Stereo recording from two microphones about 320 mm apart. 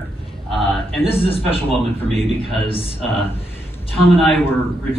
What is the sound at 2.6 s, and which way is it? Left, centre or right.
Speech, centre.